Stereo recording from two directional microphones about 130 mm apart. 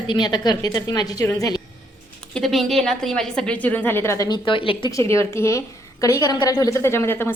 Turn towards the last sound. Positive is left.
turn(degrees=20)  # may be behind; listen again after turning